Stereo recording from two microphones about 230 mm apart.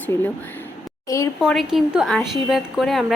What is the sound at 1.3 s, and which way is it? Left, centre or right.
A woman's voice, centre.